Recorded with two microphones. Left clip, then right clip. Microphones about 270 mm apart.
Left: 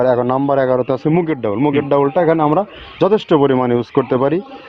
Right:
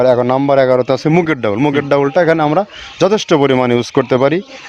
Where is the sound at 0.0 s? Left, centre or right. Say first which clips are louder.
Right 3 dB; right.